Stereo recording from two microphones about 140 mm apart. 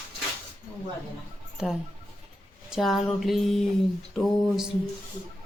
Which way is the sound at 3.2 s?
Centre (ahead or behind).